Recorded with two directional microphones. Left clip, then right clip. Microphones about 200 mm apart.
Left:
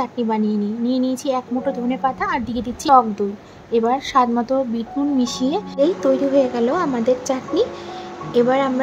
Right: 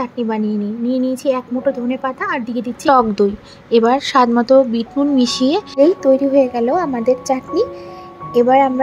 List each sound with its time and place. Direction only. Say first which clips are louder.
0.0 s speech: right 1 dB; 10° right (ahead or behind)
2.9 s speech: right 2 dB; 25° right (ahead or behind)